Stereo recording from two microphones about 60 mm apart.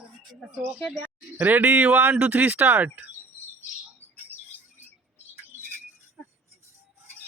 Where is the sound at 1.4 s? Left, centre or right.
Right.